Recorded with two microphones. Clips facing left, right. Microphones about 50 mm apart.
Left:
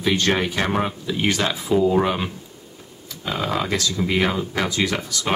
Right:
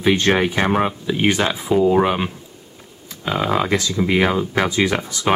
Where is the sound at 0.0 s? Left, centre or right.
Right.